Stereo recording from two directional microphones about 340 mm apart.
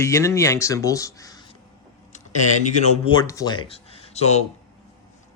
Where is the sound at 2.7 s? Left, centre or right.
Centre.